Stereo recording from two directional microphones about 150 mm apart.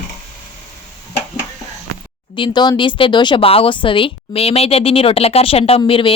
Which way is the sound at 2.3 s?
30° left (ahead or behind).